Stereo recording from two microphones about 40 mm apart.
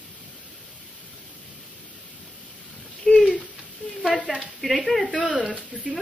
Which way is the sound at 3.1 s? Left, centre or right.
Centre.